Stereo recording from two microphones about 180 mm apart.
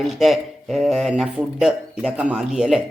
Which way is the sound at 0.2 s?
Centre (ahead or behind).